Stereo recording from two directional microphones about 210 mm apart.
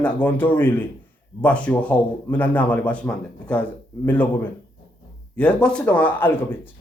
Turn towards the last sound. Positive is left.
turn(degrees=10)  # may be behind; listen again after turning